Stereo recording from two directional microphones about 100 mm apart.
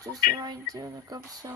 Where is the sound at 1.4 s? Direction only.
40° right (ahead or behind).